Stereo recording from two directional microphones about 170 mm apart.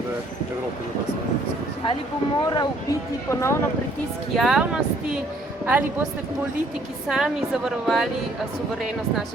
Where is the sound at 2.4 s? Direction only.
25° left (ahead or behind).